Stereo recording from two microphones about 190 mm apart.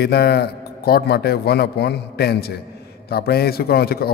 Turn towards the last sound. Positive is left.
turn(degrees=55)  # may be behind; listen again after turning